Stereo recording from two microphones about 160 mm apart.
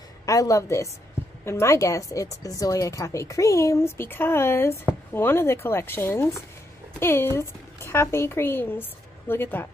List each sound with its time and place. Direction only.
0.3 s a woman's voice: 20° left (ahead or behind)